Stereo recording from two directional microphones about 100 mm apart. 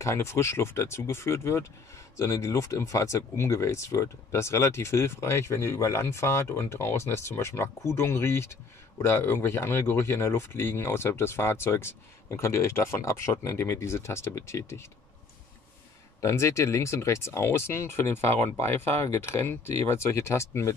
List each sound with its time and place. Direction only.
0.0 s speech: 30° left (ahead or behind)
16.2 s speech: 30° left (ahead or behind)
19.0 s speech: 25° left (ahead or behind)